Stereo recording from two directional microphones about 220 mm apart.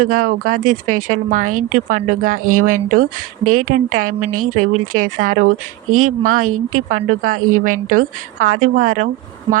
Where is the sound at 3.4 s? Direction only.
90° right.